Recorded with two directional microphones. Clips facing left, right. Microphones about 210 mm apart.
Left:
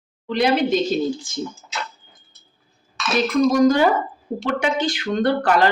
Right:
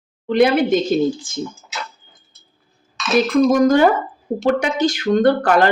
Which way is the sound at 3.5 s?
55° right (ahead or behind).